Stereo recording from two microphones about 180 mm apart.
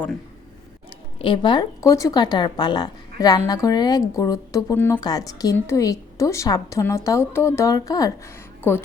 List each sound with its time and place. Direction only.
1.2 s speech: 30° left (ahead or behind)